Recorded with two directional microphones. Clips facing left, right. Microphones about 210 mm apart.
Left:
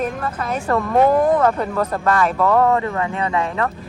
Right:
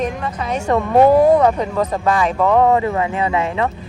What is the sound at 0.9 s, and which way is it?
Speech, 15° right (ahead or behind).